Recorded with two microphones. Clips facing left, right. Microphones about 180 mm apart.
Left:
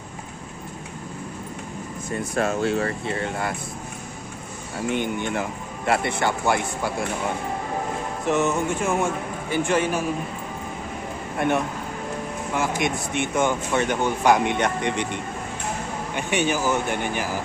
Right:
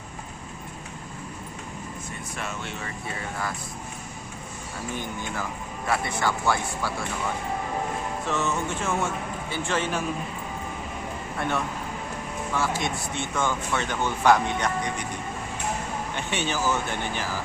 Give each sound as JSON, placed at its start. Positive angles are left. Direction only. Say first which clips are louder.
{"t": 2.3, "sound": "speech", "louder": "left 13 dB", "side_deg": 40}
{"t": 4.9, "sound": "a man's voice", "louder": "left 7 dB", "side_deg": 20}
{"t": 8.3, "sound": "speech", "louder": "left 7 dB", "side_deg": 15}
{"t": 11.3, "sound": "speech", "louder": "left 6 dB", "side_deg": 20}
{"t": 16.1, "sound": "speech", "louder": "left 7 dB", "side_deg": 15}